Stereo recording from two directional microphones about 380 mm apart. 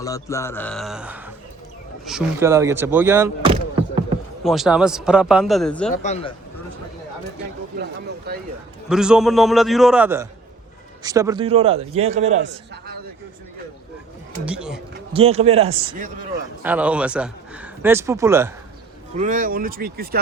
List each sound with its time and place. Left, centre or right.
0.0 s a man's voice: centre
5.9 s speech: centre
8.9 s a man's voice: centre; by 12.9 s right
14.4 s a man's voice: centre
15.1 s speech: centre
16.6 s a man's voice: centre
19.1 s speech: centre